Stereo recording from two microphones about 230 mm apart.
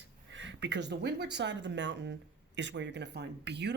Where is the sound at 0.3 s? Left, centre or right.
Right.